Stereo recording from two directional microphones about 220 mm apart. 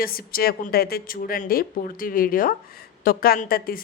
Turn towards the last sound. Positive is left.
turn(degrees=40)  # may be behind; listen again after turning